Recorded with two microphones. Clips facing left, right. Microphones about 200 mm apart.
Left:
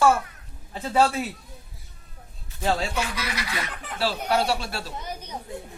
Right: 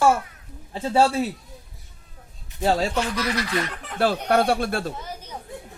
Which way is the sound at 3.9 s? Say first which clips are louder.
Right 4 dB; 55° right (ahead or behind).